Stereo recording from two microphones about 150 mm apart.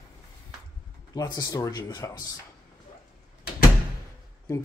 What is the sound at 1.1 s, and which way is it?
Speech, 25° left (ahead or behind).